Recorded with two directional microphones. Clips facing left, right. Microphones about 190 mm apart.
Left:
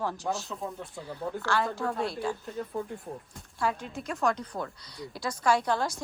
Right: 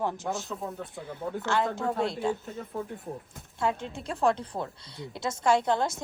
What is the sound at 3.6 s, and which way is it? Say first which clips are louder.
A woman's voice: right 1 dB; 25° right (ahead or behind).